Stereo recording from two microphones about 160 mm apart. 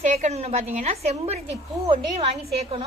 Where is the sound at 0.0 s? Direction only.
45° right (ahead or behind).